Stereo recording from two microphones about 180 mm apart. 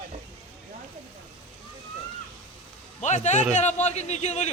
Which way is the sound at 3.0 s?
40° left (ahead or behind).